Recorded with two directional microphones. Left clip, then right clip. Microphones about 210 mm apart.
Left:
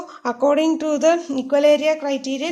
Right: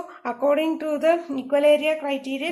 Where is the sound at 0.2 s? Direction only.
25° left (ahead or behind).